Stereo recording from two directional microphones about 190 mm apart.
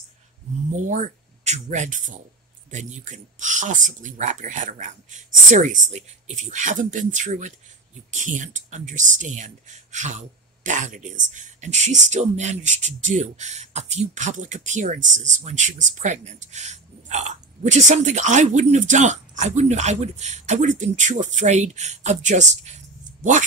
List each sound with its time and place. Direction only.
0.7 s speech: 40° right (ahead or behind)